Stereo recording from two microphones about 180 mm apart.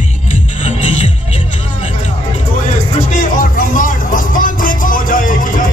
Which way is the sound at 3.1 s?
50° left (ahead or behind).